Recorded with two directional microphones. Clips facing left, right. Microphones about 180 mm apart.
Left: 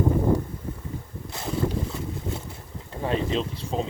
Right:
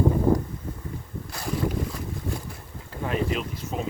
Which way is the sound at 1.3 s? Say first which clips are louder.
Left 1 dB; 25° left (ahead or behind).